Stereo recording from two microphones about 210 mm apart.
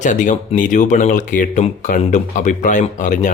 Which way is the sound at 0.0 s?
35° left (ahead or behind).